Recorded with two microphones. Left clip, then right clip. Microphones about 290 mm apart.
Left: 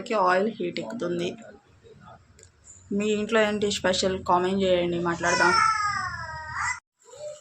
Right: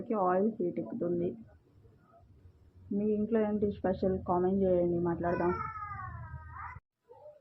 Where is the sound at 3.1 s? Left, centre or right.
Centre.